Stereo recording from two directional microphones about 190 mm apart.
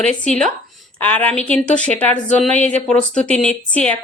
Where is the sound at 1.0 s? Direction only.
10° left (ahead or behind).